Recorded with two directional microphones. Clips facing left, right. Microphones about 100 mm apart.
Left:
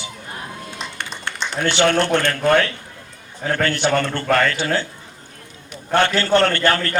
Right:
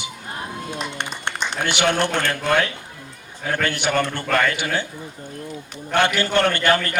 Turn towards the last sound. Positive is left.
turn(degrees=-15)  # may be behind; listen again after turning